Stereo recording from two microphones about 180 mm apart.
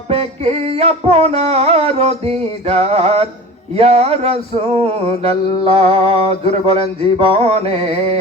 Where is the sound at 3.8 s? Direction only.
35° right (ahead or behind).